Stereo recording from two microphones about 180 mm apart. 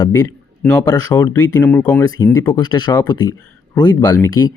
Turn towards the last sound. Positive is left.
turn(degrees=20)  # may be behind; listen again after turning